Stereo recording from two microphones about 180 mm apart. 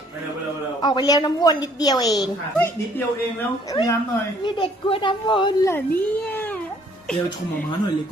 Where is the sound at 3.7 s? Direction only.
15° left (ahead or behind).